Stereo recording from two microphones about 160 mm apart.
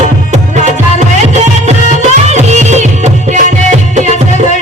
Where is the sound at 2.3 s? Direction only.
45° right (ahead or behind).